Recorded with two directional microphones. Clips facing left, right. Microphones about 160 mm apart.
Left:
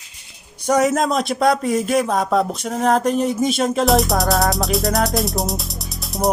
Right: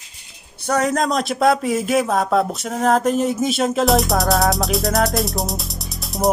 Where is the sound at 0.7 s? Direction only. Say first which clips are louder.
Left 2 dB; 5° left (ahead or behind).